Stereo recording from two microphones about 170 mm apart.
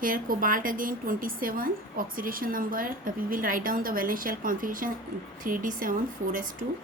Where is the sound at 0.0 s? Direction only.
55° right (ahead or behind).